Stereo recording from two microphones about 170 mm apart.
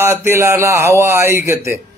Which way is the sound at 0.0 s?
15° right (ahead or behind).